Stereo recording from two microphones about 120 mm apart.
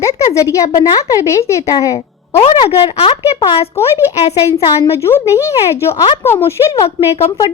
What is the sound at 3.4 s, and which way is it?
Speech, 40° left (ahead or behind).